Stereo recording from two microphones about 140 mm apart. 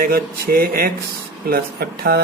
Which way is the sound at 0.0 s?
90° right.